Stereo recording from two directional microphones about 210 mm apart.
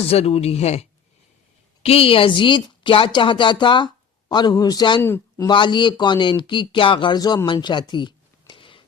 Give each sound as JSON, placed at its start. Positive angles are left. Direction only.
{"t": 0.1, "sound": "speech", "side_deg": 30}
{"t": 5.0, "sound": "speech", "side_deg": 10}
{"t": 5.5, "sound": "speech", "side_deg": 20}